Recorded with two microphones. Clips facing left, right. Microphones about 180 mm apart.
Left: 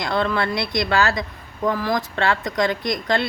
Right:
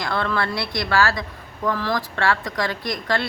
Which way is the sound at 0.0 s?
20° left (ahead or behind).